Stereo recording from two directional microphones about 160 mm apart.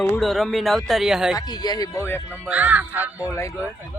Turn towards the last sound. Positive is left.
turn(degrees=-10)  # may be behind; listen again after turning